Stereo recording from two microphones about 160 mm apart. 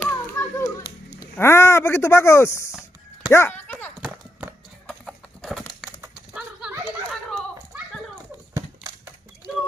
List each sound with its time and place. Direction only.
0.0 s children playing: 15° left (ahead or behind)
1.3 s speech: 15° left (ahead or behind)
2.7 s a sound: 5° right (ahead or behind)
3.3 s speech: 10° left (ahead or behind)
4.0 s clip-clop: 10° right (ahead or behind)
4.8 s a sound: centre (ahead or behind)
6.8 s children playing: centre (ahead or behind)